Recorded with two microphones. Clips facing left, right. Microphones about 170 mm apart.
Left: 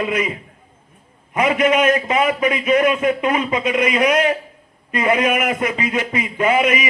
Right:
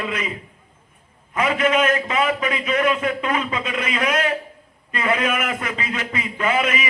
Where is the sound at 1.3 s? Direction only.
20° left (ahead or behind).